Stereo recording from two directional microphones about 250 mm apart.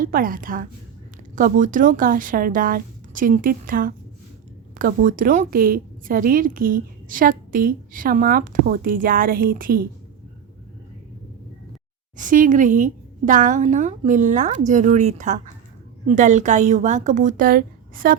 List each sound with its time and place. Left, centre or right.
0.0 s a woman's voice: right
12.1 s a woman's voice: right